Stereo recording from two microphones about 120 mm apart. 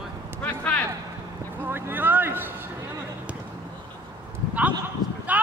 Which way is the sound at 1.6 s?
20° right (ahead or behind).